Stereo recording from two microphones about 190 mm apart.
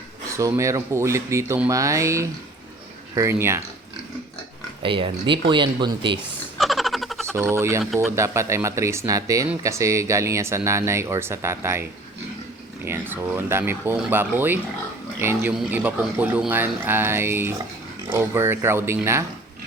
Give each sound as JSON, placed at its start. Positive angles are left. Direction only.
{"t": 0.3, "sound": "speech", "side_deg": -15}
{"t": 4.8, "sound": "speech", "side_deg": -25}
{"t": 6.6, "sound": "a sound", "side_deg": 0}
{"t": 7.3, "sound": "speech", "side_deg": -15}